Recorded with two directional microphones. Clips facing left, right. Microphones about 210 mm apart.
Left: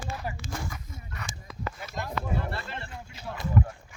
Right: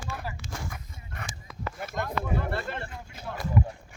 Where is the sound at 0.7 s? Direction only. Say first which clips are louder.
Left 1 dB; 50° right (ahead or behind).